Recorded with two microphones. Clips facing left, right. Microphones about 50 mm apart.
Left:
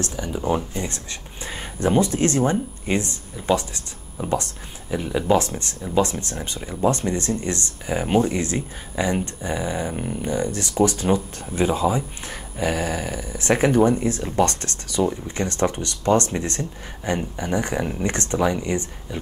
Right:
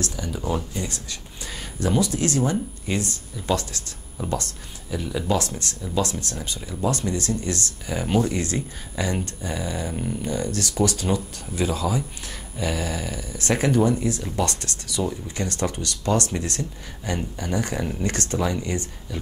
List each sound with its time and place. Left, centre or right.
0.0 s speech: left